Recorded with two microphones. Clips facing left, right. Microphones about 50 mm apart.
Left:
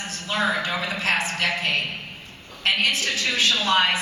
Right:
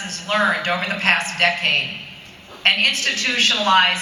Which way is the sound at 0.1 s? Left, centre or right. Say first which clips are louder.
Right 5 dB; right.